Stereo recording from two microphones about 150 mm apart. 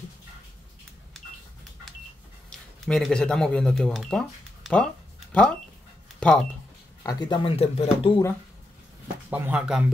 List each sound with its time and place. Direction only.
2.5 s speech: 5° left (ahead or behind)
6.1 s cash register: 5° left (ahead or behind)
7.0 s speech: 25° left (ahead or behind); by 8.1 s 40° left (ahead or behind)
9.0 s speech: 10° right (ahead or behind)